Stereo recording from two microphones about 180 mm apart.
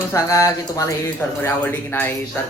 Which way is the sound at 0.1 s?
15° left (ahead or behind).